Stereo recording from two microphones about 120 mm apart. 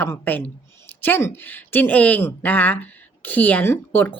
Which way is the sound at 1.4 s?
15° left (ahead or behind).